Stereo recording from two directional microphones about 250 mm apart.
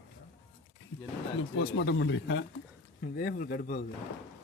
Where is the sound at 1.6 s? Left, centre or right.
Left.